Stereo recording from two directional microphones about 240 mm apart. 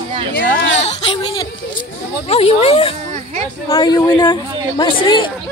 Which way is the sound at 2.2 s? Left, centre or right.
Left.